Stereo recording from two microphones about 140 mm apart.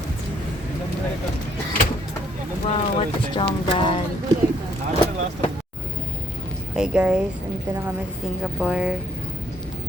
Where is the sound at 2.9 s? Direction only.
40° left (ahead or behind).